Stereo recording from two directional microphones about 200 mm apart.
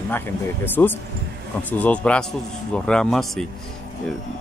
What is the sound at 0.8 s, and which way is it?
A man's voice, 10° left (ahead or behind).